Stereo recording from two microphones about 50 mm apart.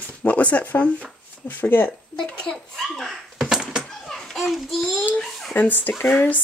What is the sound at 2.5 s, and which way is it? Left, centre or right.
Speech, centre.